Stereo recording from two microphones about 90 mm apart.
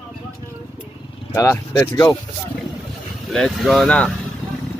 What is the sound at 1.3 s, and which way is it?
Speech, 35° left (ahead or behind).